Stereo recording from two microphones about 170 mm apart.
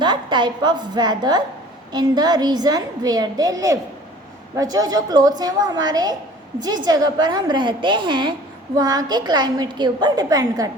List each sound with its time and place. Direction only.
0.0 s a woman's voice: 25° right (ahead or behind)